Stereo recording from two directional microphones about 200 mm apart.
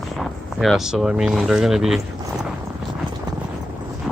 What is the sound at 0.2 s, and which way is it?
Speech, centre (ahead or behind).